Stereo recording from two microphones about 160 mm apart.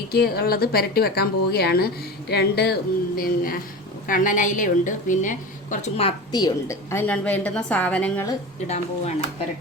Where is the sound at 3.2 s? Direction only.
60° left (ahead or behind).